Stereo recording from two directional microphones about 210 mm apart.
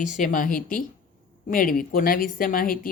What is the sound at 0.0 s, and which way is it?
A woman's voice, 40° left (ahead or behind).